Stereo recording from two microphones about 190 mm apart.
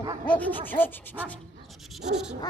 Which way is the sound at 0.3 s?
10° left (ahead or behind).